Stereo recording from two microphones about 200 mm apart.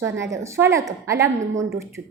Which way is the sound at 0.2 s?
15° right (ahead or behind).